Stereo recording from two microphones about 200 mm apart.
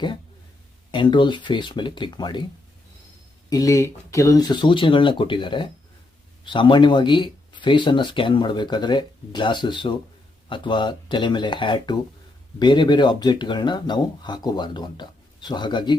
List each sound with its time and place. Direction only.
0.9 s speech: 25° left (ahead or behind)
3.5 s speech: 15° left (ahead or behind)